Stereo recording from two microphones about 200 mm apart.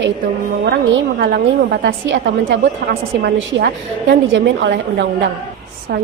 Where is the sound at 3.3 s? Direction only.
65° right (ahead or behind).